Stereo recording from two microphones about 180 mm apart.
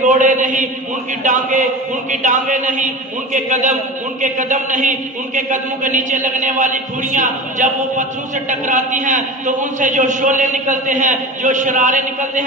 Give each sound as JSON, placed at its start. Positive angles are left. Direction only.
{"t": 0.1, "sound": "a man's voice", "side_deg": -45}